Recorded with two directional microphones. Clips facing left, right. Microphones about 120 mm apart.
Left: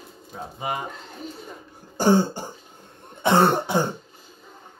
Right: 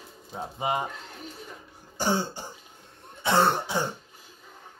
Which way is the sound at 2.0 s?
50° left (ahead or behind).